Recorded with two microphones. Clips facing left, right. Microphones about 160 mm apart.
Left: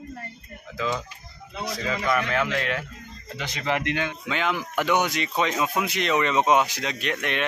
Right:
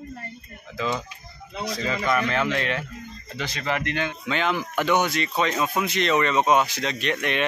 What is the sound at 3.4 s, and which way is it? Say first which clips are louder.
Speech: even; 20° left (ahead or behind).